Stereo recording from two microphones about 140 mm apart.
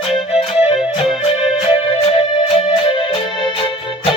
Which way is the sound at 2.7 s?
35° left (ahead or behind).